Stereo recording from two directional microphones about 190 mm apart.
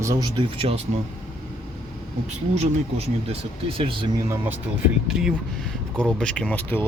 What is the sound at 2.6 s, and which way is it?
Speech, 30° right (ahead or behind).